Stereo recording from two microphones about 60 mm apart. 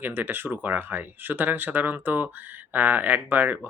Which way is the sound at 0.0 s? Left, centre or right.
Right.